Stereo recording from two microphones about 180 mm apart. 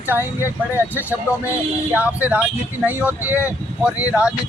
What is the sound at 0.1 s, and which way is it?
Speech, 10° right (ahead or behind).